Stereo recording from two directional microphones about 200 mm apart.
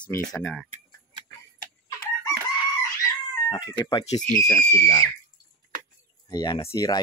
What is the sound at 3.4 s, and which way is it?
Speech, 20° left (ahead or behind).